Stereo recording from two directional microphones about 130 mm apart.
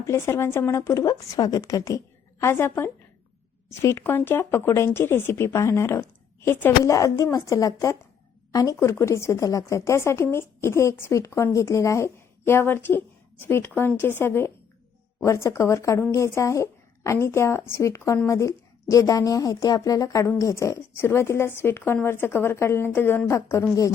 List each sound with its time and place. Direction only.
0.0 s a woman's voice: 20° left (ahead or behind)